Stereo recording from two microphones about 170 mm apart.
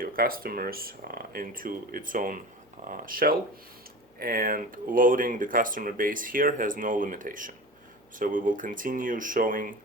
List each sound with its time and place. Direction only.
0.0 s speech: 60° right (ahead or behind)